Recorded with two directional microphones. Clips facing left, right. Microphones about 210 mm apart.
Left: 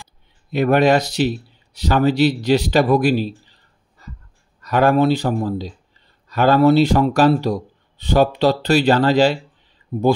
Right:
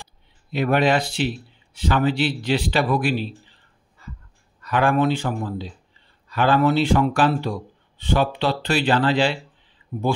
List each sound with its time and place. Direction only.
0.5 s speech: 45° left (ahead or behind)